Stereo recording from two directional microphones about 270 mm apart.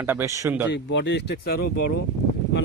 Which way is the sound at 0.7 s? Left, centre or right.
Left.